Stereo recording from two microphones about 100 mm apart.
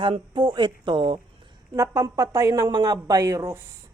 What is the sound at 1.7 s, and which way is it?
A man's voice, 35° right (ahead or behind).